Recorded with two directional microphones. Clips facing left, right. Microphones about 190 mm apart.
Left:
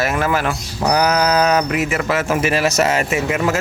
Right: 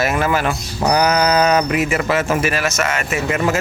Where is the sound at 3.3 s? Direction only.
5° left (ahead or behind).